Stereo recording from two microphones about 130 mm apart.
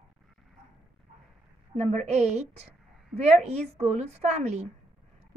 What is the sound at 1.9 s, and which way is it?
A woman's voice, 55° right (ahead or behind).